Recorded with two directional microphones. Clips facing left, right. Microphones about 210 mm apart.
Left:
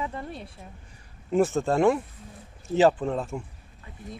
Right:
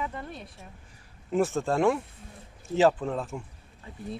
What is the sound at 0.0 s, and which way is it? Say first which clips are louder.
Speech: left 2 dB; 25° left (ahead or behind).